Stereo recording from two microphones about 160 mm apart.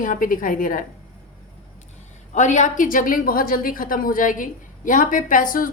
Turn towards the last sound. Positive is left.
turn(degrees=60)  # may be behind; listen again after turning